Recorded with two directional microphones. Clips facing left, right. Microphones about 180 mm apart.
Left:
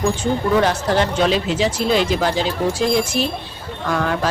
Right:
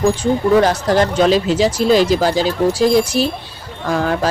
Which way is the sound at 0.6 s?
40° right (ahead or behind).